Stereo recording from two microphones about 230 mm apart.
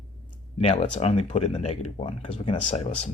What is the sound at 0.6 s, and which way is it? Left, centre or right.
Speech, left.